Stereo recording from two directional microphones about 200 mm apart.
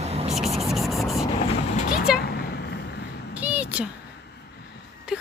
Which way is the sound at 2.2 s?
50° left (ahead or behind).